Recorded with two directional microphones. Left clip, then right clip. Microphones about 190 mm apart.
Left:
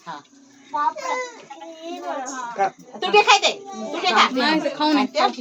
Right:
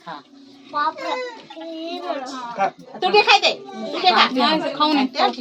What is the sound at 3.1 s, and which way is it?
A woman's voice, 30° left (ahead or behind).